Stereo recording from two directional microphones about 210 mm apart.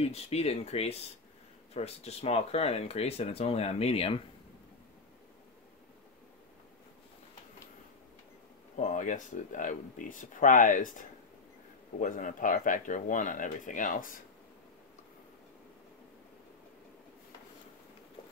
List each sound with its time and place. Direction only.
0.0 s speech: 30° left (ahead or behind)
8.7 s speech: 35° left (ahead or behind)